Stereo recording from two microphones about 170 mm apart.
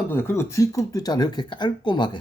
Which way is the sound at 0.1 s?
15° left (ahead or behind).